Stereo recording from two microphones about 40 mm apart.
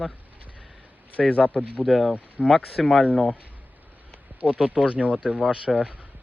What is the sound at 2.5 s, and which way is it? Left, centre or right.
Speech, centre.